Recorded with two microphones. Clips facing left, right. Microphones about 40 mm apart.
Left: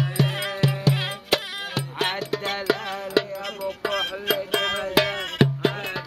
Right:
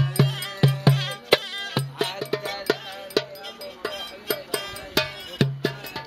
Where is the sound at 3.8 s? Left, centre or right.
Left.